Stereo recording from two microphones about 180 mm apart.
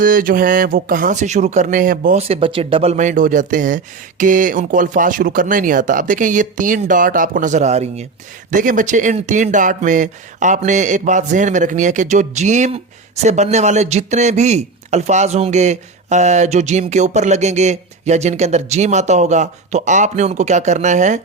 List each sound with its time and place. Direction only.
0.0 s speech: 50° right (ahead or behind)
2.2 s speech: 30° right (ahead or behind)